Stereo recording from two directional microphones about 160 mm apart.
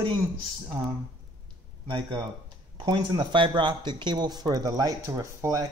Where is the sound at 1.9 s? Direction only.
30° right (ahead or behind).